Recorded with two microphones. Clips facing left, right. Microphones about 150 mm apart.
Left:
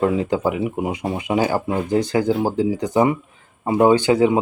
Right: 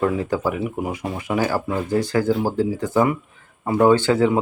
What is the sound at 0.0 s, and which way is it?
Speech, 20° left (ahead or behind).